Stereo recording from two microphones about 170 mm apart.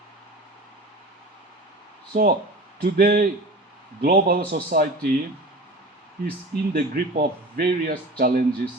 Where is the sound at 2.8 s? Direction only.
65° right (ahead or behind).